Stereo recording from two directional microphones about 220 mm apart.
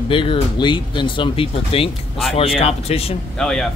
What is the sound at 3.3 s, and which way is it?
Speech, 5° left (ahead or behind).